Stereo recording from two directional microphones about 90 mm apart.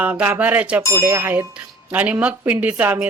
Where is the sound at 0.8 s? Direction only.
30° right (ahead or behind).